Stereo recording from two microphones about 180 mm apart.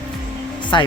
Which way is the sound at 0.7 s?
25° left (ahead or behind).